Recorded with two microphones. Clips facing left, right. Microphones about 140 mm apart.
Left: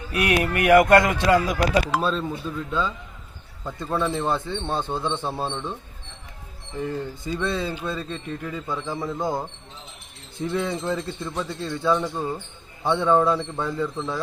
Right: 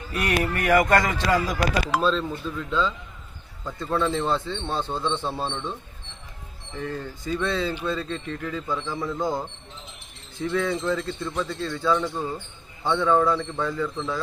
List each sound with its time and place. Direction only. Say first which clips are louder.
0.1 s a sound: left 2 dB; 70° left (ahead or behind)
0.7 s speech: left 5 dB; 15° left (ahead or behind)
6.7 s speech: left 3 dB; 15° left (ahead or behind)
10.5 s speech: right 1 dB; 25° left (ahead or behind)